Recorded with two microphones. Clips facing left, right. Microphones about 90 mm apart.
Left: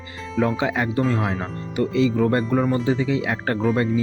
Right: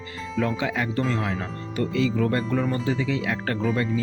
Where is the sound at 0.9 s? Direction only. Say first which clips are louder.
Left 4 dB; 15° left (ahead or behind).